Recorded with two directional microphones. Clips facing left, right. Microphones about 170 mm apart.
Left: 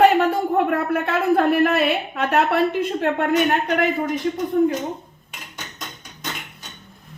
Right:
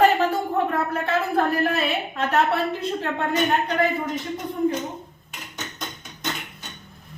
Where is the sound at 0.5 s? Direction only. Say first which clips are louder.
Left 4 dB; 65° left (ahead or behind).